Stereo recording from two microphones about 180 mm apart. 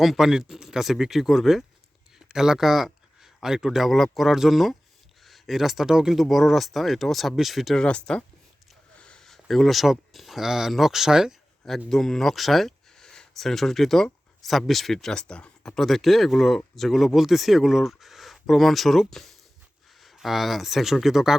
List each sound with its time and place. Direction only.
0.0 s speech: centre (ahead or behind)